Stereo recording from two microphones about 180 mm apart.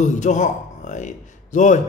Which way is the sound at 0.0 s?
40° left (ahead or behind).